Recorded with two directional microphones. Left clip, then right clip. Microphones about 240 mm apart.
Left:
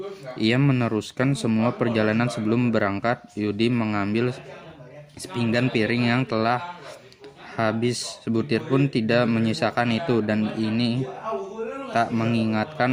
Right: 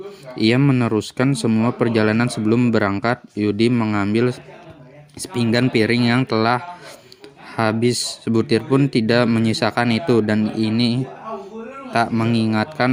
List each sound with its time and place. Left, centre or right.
0.3 s speech: right